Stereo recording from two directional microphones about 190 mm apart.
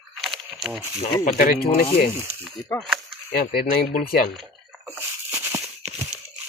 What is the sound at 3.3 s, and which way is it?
Speech, 50° left (ahead or behind).